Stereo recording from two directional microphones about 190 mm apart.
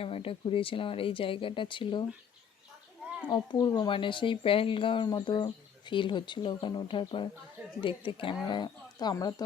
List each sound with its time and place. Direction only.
0.0 s speech: 30° left (ahead or behind)
3.2 s speech: 25° left (ahead or behind)